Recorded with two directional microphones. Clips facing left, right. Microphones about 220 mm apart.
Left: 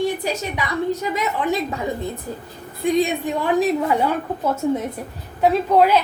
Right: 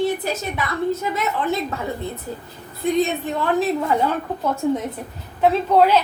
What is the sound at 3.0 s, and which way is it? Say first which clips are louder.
Speech: even; 15° left (ahead or behind).